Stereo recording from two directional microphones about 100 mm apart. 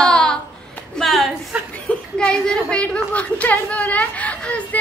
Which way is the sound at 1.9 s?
10° left (ahead or behind).